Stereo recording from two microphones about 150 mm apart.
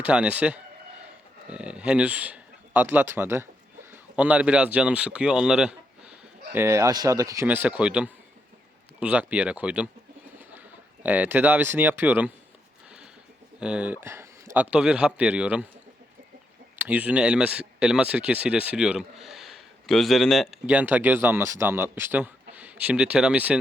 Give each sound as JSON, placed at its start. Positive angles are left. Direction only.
{"t": 0.0, "sound": "a man's voice", "side_deg": -10}
{"t": 7.4, "sound": "speech", "side_deg": -10}
{"t": 11.0, "sound": "speech", "side_deg": -10}
{"t": 13.6, "sound": "speech", "side_deg": -10}
{"t": 16.8, "sound": "speech", "side_deg": -10}
{"t": 20.7, "sound": "speech", "side_deg": -10}